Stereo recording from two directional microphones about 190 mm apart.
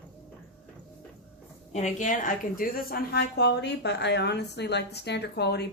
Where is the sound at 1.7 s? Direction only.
40° left (ahead or behind); by 5.6 s 60° left (ahead or behind).